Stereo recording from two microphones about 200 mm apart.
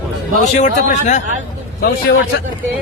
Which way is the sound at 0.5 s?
35° left (ahead or behind).